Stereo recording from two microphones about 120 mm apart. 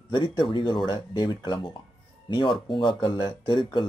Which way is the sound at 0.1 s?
40° left (ahead or behind).